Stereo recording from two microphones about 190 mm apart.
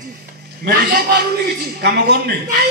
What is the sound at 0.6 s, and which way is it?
A man's voice, 60° right (ahead or behind).